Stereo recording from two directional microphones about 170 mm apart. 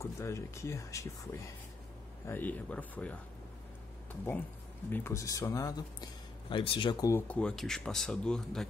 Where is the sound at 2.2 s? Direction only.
10° left (ahead or behind).